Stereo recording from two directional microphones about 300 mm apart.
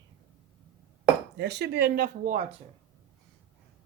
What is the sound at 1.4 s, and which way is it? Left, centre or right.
Speech, right.